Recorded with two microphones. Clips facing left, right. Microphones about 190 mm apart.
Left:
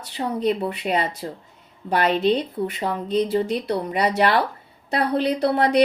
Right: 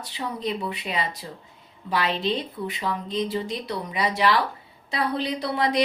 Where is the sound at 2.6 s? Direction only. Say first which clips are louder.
Left 6 dB; 35° left (ahead or behind).